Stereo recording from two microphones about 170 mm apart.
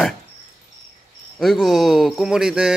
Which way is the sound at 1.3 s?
Centre (ahead or behind).